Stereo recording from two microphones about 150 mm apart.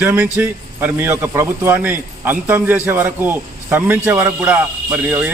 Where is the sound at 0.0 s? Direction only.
10° right (ahead or behind).